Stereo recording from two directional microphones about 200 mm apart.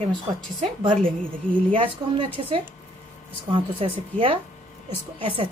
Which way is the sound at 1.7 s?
25° right (ahead or behind).